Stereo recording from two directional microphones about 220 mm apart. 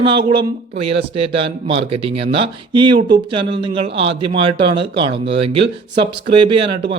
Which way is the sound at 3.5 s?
25° right (ahead or behind).